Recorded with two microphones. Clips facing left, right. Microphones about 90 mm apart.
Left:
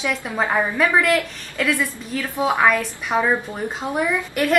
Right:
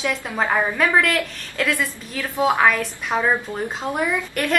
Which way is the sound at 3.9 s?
15° left (ahead or behind).